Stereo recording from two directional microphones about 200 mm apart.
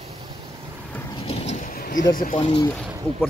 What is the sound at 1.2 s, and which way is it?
Vehicle, 35° left (ahead or behind).